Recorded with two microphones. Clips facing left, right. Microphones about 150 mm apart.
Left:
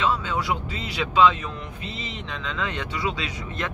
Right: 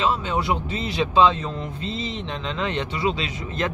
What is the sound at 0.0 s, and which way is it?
Speech, 25° right (ahead or behind).